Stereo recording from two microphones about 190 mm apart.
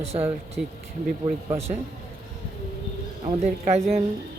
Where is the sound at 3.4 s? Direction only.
35° right (ahead or behind).